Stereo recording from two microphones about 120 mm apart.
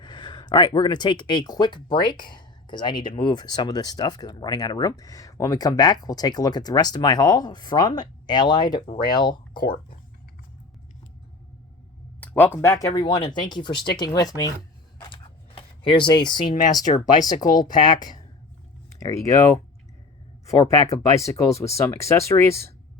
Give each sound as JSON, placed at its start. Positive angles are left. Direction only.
{"t": 0.0, "sound": "speech", "side_deg": 40}
{"t": 12.2, "sound": "a sound", "side_deg": 15}
{"t": 12.5, "sound": "speech", "side_deg": 25}
{"t": 15.0, "sound": "a sound", "side_deg": 45}
{"t": 16.8, "sound": "speech", "side_deg": 90}
{"t": 17.2, "sound": "speech", "side_deg": 35}
{"t": 20.7, "sound": "speech", "side_deg": 25}